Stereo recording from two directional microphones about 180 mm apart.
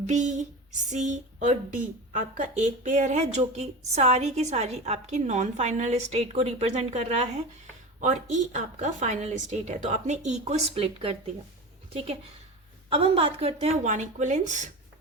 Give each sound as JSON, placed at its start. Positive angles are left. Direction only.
{"t": 0.0, "sound": "a woman's voice", "side_deg": -40}
{"t": 12.9, "sound": "a woman's voice", "side_deg": -30}